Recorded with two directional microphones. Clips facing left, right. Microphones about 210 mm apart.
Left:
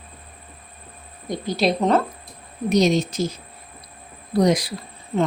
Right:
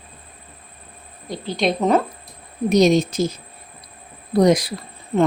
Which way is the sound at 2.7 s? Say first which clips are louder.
Right 3 dB; 45° right (ahead or behind).